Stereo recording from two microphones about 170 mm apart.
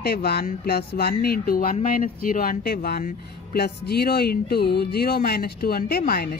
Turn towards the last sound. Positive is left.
turn(degrees=60)  # may be behind; listen again after turning